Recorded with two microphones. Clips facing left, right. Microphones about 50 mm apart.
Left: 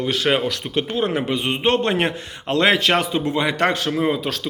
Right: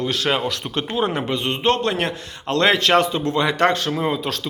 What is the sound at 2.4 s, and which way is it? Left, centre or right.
Speech, centre.